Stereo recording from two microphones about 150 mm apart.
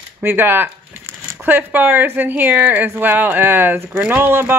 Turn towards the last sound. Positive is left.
turn(degrees=-15)  # may be behind; listen again after turning